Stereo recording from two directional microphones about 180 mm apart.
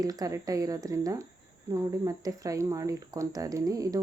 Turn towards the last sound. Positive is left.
turn(degrees=-20)  # may be behind; listen again after turning